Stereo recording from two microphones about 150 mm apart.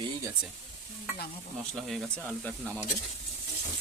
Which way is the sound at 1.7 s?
Centre (ahead or behind).